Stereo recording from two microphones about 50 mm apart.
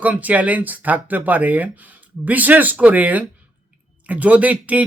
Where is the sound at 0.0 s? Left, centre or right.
Right.